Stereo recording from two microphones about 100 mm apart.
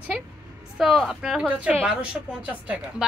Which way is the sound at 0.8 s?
5° right (ahead or behind).